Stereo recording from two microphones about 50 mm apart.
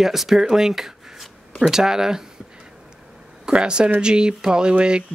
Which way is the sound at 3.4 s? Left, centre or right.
Centre.